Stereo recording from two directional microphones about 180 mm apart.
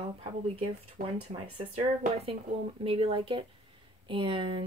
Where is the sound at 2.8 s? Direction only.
30° right (ahead or behind).